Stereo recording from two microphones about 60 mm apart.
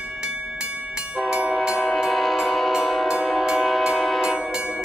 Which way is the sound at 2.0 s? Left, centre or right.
Centre.